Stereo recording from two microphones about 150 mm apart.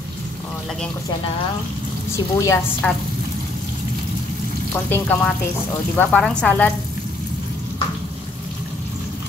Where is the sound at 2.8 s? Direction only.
10° left (ahead or behind).